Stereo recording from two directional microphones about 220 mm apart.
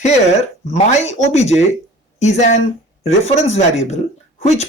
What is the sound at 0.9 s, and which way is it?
Speech, 30° left (ahead or behind).